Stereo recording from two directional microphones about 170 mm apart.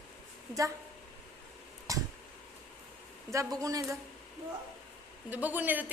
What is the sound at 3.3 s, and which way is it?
Speech, 20° right (ahead or behind).